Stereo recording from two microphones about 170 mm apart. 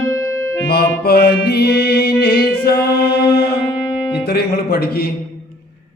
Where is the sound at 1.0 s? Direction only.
70° left (ahead or behind).